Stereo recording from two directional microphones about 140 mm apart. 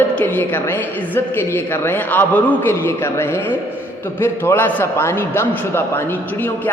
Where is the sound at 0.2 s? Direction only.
15° left (ahead or behind).